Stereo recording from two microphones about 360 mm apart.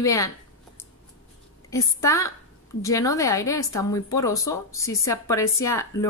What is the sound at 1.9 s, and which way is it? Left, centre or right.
A woman's voice, centre.